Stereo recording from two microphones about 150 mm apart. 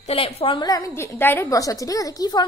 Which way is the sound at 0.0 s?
40° left (ahead or behind).